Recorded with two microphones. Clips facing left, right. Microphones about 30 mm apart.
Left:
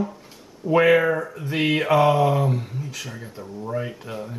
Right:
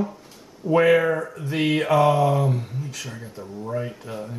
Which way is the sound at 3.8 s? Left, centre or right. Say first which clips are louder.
Even; centre.